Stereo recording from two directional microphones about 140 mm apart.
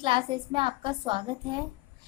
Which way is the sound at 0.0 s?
35° right (ahead or behind).